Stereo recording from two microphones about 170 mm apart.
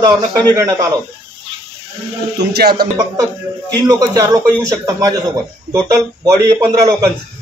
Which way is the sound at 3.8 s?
25° right (ahead or behind).